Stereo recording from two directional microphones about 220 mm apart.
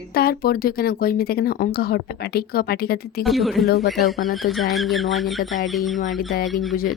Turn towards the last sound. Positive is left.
turn(degrees=0)  # may be behind; listen again after turning